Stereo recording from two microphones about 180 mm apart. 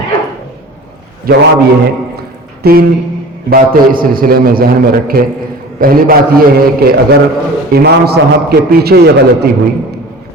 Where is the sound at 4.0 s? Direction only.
55° right (ahead or behind).